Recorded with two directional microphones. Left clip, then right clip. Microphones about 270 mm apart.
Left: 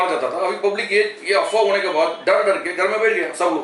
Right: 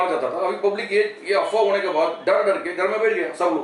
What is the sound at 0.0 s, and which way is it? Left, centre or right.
A man's voice, centre.